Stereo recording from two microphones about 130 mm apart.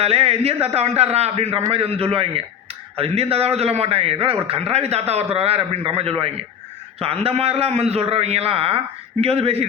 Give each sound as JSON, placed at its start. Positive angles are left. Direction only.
{"t": 0.0, "sound": "a man's voice", "side_deg": -50}